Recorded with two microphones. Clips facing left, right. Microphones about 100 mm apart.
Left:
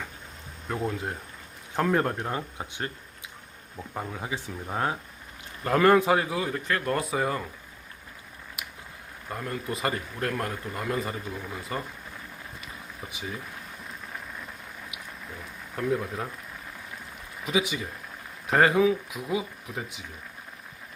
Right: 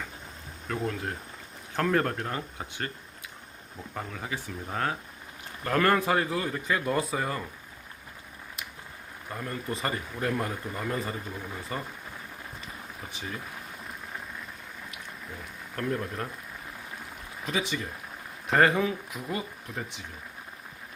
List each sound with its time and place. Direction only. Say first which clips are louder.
0.8 s speech: left 1 dB; 15° left (ahead or behind)
3.9 s speech: left 2 dB; 15° left (ahead or behind)
6.7 s speech: right 1 dB; 5° right (ahead or behind)
7.1 s speech: left 3 dB; 5° left (ahead or behind)
9.3 s speech: left 2 dB; centre (ahead or behind)
13.1 s speech: left 2 dB; 10° left (ahead or behind)
15.7 s speech: left 3 dB; 5° left (ahead or behind)
17.4 s speech: left 3 dB; 5° left (ahead or behind)